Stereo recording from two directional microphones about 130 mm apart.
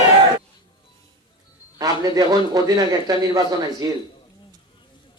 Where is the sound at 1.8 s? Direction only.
30° right (ahead or behind).